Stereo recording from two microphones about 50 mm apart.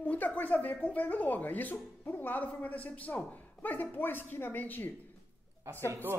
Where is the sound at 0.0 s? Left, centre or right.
Left.